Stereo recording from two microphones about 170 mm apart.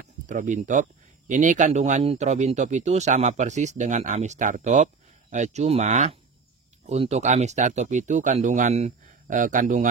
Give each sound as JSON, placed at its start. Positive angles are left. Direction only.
{"t": 0.3, "sound": "speech", "side_deg": -45}